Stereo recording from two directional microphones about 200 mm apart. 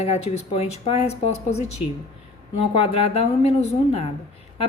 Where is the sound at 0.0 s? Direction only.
35° left (ahead or behind).